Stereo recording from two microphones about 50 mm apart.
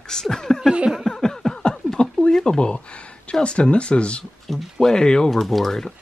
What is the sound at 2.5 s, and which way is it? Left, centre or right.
Speech, centre.